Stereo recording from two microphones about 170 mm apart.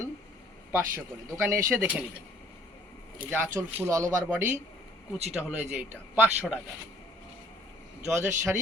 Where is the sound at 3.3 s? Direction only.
15° right (ahead or behind).